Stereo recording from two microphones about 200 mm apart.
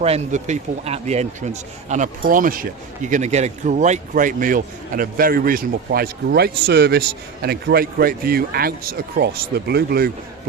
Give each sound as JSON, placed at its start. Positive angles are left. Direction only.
{"t": 0.0, "sound": "speech", "side_deg": -35}